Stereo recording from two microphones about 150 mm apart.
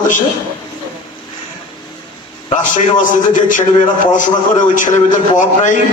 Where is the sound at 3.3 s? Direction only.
60° left (ahead or behind).